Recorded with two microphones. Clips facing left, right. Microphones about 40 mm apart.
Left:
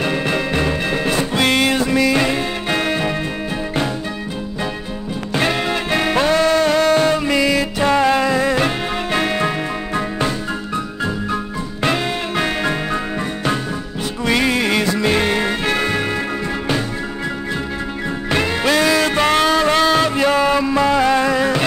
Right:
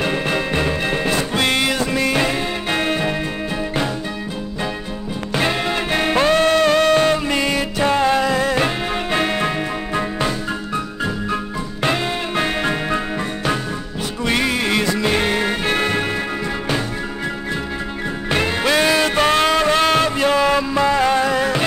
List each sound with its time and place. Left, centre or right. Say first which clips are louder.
6.0 s music: even; right
7.8 s music: left 1 dB; left
9.1 s music: left 1 dB; right
12.4 s music: even; right
14.3 s music: left 2 dB; left
15.4 s music: even; right
18.6 s music: left 1 dB; right
20.2 s music: left 1 dB; left